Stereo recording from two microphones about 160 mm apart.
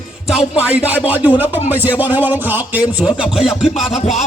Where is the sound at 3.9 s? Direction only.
45° left (ahead or behind).